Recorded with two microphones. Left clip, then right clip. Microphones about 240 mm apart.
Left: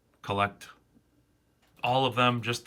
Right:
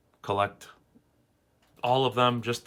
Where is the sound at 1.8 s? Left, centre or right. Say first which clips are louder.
Right 1 dB; centre.